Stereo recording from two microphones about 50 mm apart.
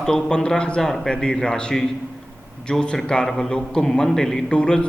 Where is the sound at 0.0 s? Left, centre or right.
Centre.